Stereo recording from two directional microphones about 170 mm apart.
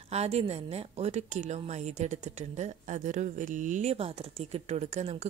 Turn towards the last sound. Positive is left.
turn(degrees=-40)  # may be behind; listen again after turning